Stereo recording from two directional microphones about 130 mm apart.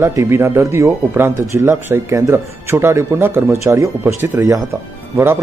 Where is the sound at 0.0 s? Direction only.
20° right (ahead or behind).